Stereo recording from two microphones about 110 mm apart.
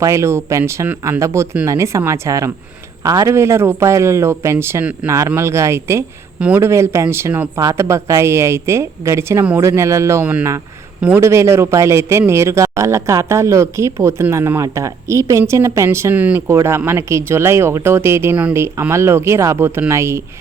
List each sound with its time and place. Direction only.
0.0 s a man's voice: 25° right (ahead or behind)